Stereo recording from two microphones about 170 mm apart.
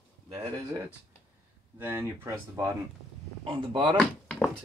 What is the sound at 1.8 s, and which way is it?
Speech, 15° right (ahead or behind).